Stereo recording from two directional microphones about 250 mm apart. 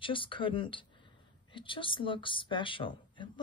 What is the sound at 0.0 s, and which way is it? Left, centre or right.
Speech, left.